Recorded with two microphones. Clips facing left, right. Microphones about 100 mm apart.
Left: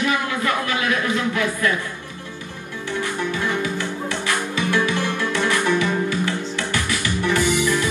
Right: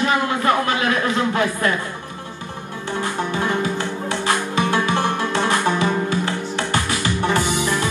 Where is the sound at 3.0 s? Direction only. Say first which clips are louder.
Right 2 dB; 30° right (ahead or behind).